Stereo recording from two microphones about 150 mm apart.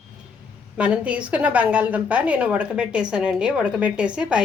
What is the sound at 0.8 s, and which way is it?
A woman's voice, 10° right (ahead or behind).